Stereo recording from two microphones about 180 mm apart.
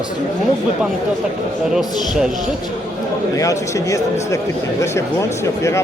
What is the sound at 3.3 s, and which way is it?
A man's voice, 20° left (ahead or behind).